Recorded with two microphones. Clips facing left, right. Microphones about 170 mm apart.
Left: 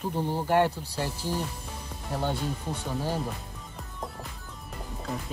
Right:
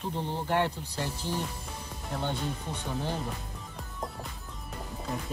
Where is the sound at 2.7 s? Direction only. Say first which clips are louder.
Left 4 dB; 35° left (ahead or behind).